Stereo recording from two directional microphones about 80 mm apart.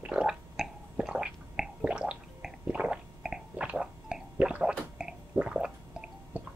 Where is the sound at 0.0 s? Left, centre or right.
Centre.